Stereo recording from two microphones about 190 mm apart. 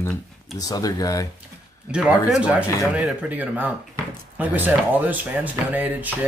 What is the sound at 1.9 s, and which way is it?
Speech, 5° right (ahead or behind).